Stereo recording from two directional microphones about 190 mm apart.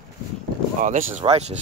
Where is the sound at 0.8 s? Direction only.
45° right (ahead or behind).